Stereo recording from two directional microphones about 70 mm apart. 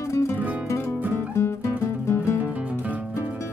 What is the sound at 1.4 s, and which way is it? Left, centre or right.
Music, left.